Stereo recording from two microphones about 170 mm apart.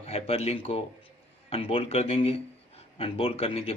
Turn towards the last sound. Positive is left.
turn(degrees=35)  # may be behind; listen again after turning